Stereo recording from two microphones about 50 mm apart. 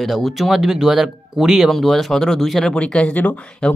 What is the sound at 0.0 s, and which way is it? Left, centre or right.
Speech, centre.